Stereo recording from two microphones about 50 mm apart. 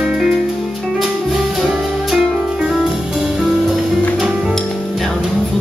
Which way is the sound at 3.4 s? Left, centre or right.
Centre.